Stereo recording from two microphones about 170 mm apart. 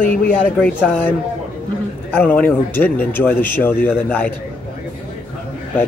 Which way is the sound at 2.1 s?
10° left (ahead or behind).